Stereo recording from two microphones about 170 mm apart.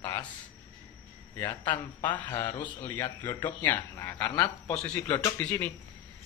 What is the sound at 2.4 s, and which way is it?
A man's voice, 15° left (ahead or behind).